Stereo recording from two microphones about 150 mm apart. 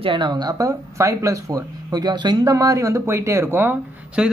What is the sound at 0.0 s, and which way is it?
Speech, 35° right (ahead or behind).